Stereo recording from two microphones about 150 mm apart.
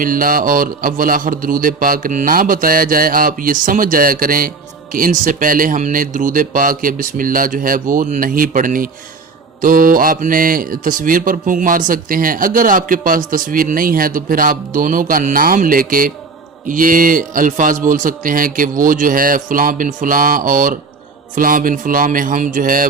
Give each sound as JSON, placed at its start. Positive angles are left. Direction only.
{"t": 0.0, "sound": "a man's voice", "side_deg": -70}